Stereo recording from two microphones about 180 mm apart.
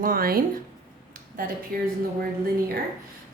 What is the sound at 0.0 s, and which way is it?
A woman's voice, 55° right (ahead or behind).